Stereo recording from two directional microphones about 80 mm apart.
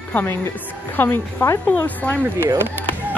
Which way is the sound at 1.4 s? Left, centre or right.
Left.